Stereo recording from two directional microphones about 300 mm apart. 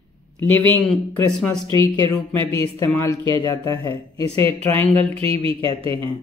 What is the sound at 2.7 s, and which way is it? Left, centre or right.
Speech, centre.